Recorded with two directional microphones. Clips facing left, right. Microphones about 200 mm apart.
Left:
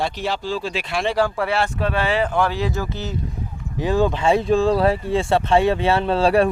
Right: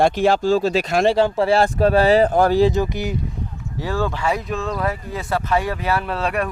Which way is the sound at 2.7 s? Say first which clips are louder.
Right 5 dB; 15° right (ahead or behind).